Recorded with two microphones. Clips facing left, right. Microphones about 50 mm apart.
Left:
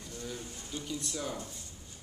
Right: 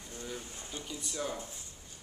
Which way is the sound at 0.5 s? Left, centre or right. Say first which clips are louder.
Left 2 dB; right.